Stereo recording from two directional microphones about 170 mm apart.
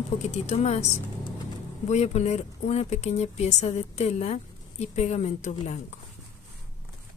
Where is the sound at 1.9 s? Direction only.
40° left (ahead or behind).